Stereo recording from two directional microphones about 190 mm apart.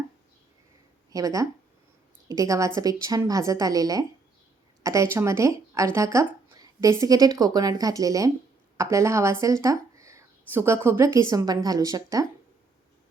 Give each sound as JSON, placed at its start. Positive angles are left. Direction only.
{"t": 1.1, "sound": "a woman's voice", "side_deg": -20}